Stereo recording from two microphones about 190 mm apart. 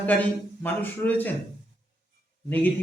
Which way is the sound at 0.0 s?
10° left (ahead or behind).